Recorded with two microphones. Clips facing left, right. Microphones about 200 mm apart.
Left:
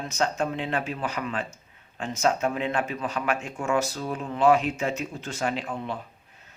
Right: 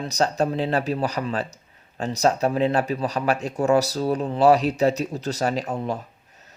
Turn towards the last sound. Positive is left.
turn(degrees=-40)  # may be behind; listen again after turning